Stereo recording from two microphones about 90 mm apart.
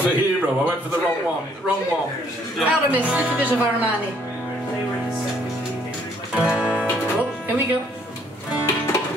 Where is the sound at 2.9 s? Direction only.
15° right (ahead or behind).